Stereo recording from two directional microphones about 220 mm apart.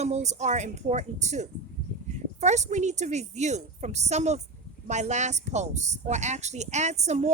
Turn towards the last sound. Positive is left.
turn(degrees=-30)  # may be behind; listen again after turning